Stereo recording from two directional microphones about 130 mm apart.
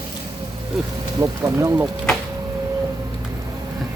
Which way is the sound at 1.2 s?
25° right (ahead or behind).